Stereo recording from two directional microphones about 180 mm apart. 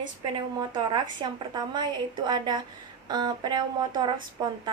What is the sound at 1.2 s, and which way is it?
A woman's voice, 25° right (ahead or behind).